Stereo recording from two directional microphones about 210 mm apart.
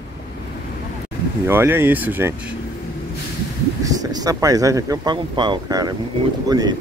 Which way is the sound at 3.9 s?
15° right (ahead or behind).